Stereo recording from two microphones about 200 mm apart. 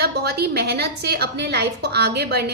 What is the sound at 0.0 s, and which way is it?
A woman's voice, 50° right (ahead or behind).